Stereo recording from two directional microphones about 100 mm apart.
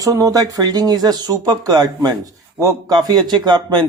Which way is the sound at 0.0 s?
35° right (ahead or behind).